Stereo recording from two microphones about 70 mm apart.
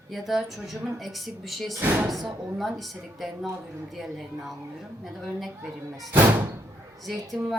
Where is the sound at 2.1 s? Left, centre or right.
Centre.